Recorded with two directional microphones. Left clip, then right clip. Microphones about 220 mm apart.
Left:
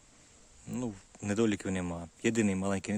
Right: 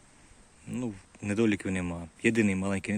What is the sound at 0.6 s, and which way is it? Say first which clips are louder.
Speech: right 2 dB; 15° left (ahead or behind).